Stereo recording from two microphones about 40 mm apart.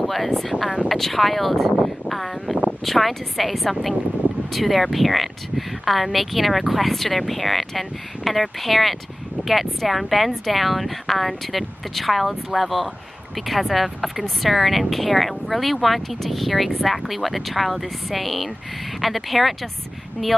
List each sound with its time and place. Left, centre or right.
0.0 s speech: centre